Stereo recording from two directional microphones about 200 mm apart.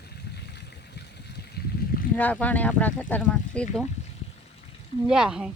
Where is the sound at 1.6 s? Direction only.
55° left (ahead or behind).